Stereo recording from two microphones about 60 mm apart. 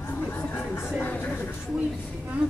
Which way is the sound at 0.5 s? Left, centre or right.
Left.